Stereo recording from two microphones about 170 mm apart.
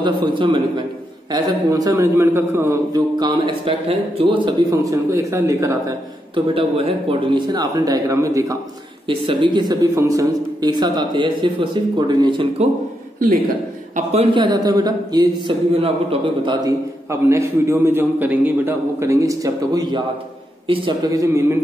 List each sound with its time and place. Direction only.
0.0 s a man's voice: 30° right (ahead or behind)
9.0 s a man's voice: 30° right (ahead or behind)
14.3 s a man's voice: 25° right (ahead or behind)
16.6 s a man's voice: 15° right (ahead or behind)